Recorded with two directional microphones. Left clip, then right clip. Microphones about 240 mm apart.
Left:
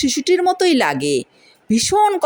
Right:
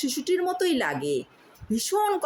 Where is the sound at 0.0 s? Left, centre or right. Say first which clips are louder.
Left 10 dB; left.